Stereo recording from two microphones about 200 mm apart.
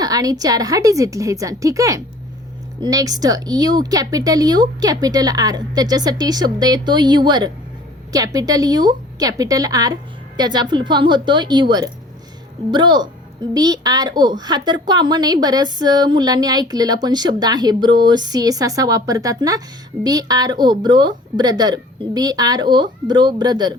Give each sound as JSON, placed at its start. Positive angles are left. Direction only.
{"t": 0.0, "sound": "a woman's voice", "side_deg": -20}